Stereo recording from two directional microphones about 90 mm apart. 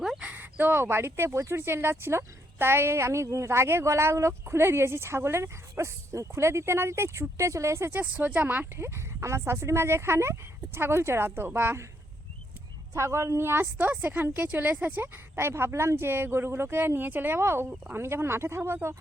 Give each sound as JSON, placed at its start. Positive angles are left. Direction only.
{"t": 0.2, "sound": "speech", "side_deg": -15}
{"t": 8.0, "sound": "speech", "side_deg": -15}
{"t": 12.9, "sound": "speech", "side_deg": -30}